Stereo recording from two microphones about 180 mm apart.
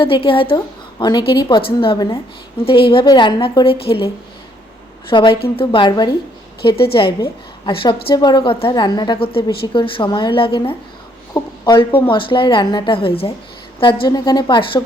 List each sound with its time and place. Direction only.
0.0 s a woman's voice: 30° left (ahead or behind)